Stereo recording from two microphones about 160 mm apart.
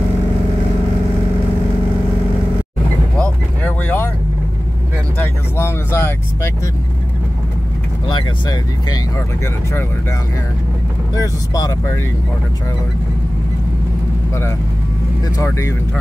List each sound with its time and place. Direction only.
3.2 s vehicle: 10° left (ahead or behind)
5.2 s vehicle: 15° left (ahead or behind)
8.1 s speech: 25° left (ahead or behind)
11.1 s speech: 20° left (ahead or behind)
15.3 s speech: 15° left (ahead or behind)